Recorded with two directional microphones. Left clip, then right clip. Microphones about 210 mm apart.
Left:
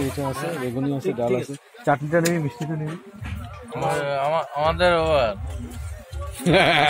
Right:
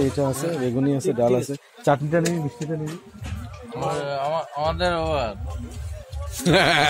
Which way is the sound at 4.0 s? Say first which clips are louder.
Left 3 dB; 15° left (ahead or behind).